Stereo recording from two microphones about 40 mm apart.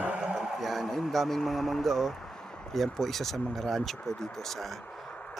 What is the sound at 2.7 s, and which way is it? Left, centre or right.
Speech, centre.